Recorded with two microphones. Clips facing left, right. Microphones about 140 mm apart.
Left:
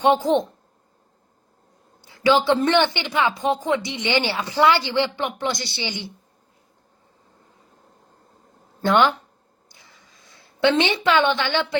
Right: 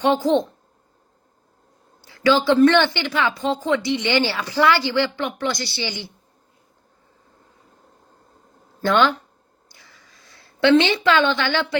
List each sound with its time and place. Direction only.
0.0 s a woman's voice: 20° left (ahead or behind)
2.0 s a woman's voice: 20° left (ahead or behind)
8.8 s a woman's voice: 20° left (ahead or behind)
9.6 s a sound: 20° left (ahead or behind)